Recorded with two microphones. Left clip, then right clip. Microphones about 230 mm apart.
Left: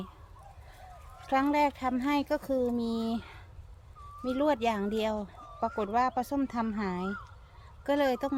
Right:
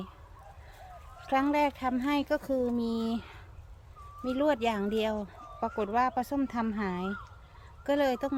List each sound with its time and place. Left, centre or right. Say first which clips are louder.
1.3 s speech: even; centre